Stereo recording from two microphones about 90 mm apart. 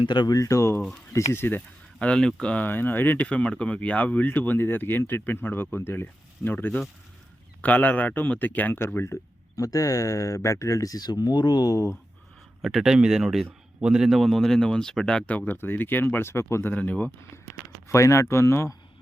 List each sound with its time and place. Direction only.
0.0 s speech: 55° left (ahead or behind)
0.3 s speech: 35° left (ahead or behind)
2.0 s a man's voice: 10° left (ahead or behind)
2.6 s speech: 20° left (ahead or behind)
9.6 s speech: 40° left (ahead or behind)
12.6 s a man's voice: 5° right (ahead or behind); by 16.7 s 30° left (ahead or behind)
16.7 s a man's voice: 15° left (ahead or behind)
17.8 s speech: 35° left (ahead or behind)